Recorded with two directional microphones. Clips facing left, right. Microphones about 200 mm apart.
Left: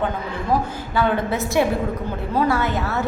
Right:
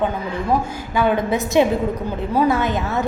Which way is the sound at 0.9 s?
15° right (ahead or behind).